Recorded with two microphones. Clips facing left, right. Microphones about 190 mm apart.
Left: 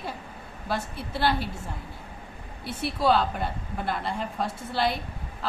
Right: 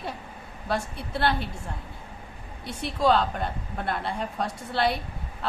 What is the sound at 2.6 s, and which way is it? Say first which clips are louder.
A woman's voice: right 1 dB; 5° left (ahead or behind).